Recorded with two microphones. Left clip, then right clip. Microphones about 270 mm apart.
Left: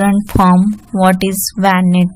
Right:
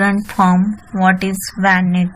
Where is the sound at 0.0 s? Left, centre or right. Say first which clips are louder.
Left 2 dB; left.